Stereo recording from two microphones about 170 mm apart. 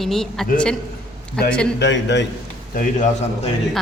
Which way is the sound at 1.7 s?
90° left.